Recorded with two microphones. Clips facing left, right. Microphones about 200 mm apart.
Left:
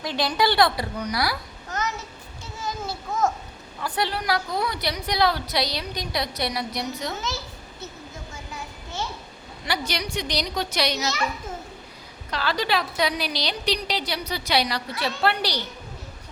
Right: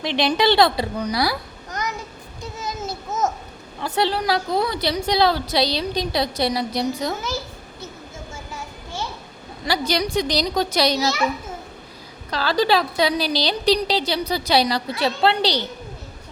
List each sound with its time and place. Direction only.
0.0 s a woman's voice: 25° right (ahead or behind)
2.4 s a sound: 20° right (ahead or behind)
3.8 s a woman's voice: 25° right (ahead or behind)
9.6 s a woman's voice: 35° right (ahead or behind)
12.3 s a woman's voice: 35° right (ahead or behind)